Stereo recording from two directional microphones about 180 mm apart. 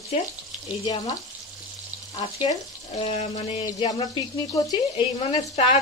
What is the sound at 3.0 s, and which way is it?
Speech, 35° left (ahead or behind).